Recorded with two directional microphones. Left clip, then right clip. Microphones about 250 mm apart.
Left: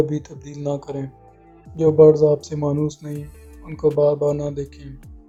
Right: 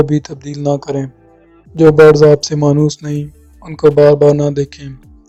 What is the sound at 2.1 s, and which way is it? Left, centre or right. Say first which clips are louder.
Speech: right 9 dB; right.